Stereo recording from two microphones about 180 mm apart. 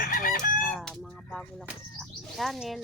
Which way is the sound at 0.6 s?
Centre (ahead or behind).